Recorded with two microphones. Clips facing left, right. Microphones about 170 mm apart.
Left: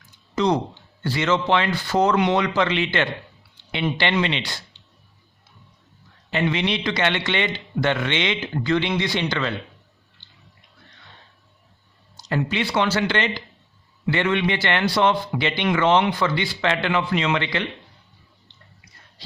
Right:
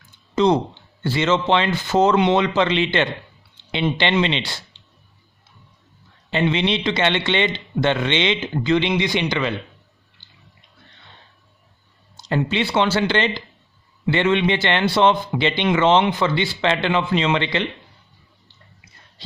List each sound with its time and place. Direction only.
0.3 s a man's voice: 25° right (ahead or behind)
6.3 s a man's voice: 25° right (ahead or behind)
10.2 s a sound: 10° right (ahead or behind)
12.1 s a man's voice: 25° right (ahead or behind)